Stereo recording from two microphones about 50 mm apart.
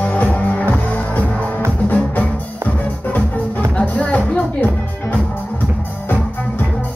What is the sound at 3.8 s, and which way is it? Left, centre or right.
Music, left.